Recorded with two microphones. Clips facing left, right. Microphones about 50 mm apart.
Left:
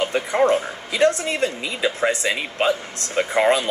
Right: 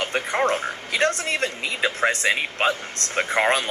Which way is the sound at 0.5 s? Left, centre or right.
Right.